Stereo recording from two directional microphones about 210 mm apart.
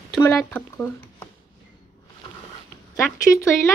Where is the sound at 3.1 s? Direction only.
15° left (ahead or behind).